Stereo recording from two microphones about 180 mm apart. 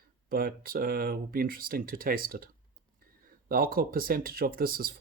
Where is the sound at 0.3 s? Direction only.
55° right (ahead or behind).